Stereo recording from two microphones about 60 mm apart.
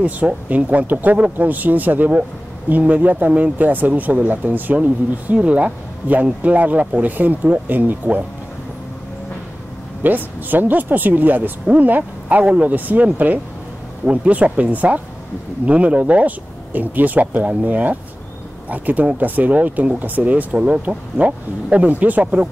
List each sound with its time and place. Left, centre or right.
0.3 s speech: right
10.0 s speech: right